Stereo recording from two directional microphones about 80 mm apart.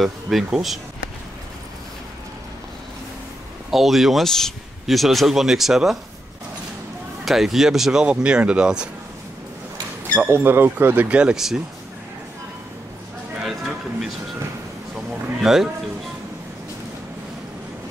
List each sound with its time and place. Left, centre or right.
0.0 s speech: centre
3.7 s speech: centre
7.2 s speech: centre
10.1 s speech: right
11.1 s speech: centre
13.4 s a sound: centre
15.4 s speech: centre